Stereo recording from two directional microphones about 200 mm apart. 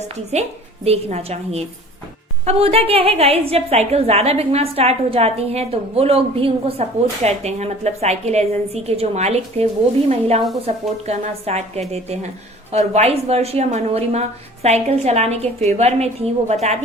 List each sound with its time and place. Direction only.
0.9 s a woman's voice: 30° right (ahead or behind)